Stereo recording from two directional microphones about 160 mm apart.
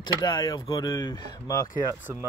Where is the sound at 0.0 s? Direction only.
25° left (ahead or behind).